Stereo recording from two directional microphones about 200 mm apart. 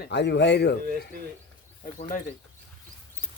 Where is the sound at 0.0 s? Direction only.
60° left (ahead or behind).